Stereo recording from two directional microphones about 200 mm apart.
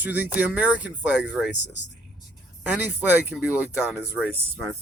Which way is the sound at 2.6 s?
10° right (ahead or behind).